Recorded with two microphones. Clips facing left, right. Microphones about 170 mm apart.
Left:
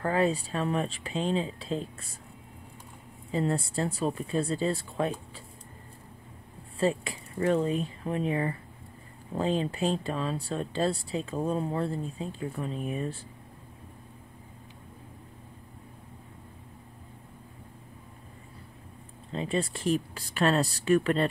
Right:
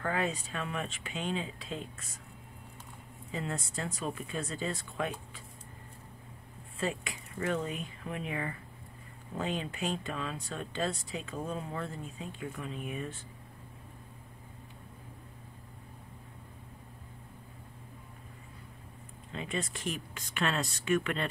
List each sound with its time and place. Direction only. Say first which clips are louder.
0.0 s speech: left 7 dB; 35° left (ahead or behind)
3.3 s speech: left 9 dB; 35° left (ahead or behind)
6.8 s speech: left 8 dB; 30° left (ahead or behind)
19.3 s speech: left 7 dB; 30° left (ahead or behind)